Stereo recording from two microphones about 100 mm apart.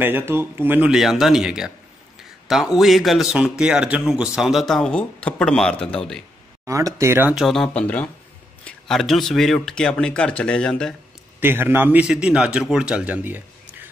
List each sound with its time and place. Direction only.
0.0 s speech: 20° right (ahead or behind)
0.9 s a man's voice: centre (ahead or behind)
6.6 s speech: 30° right (ahead or behind)
7.3 s a man's voice: centre (ahead or behind)
7.8 s speech: 15° left (ahead or behind)
8.6 s speech: 5° left (ahead or behind)
11.3 s a man's voice: 20° right (ahead or behind)